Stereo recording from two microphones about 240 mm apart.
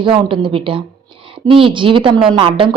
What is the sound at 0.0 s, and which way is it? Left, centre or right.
A woman's voice, right.